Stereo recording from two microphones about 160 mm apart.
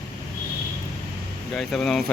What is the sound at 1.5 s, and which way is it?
Speech, centre (ahead or behind).